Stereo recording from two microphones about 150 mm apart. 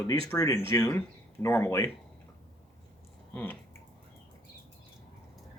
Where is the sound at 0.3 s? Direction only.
20° left (ahead or behind).